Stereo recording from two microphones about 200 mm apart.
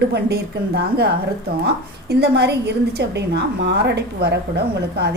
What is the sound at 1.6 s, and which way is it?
A woman's voice, 55° right (ahead or behind).